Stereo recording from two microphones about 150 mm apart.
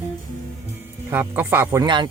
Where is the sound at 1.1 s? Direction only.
10° right (ahead or behind).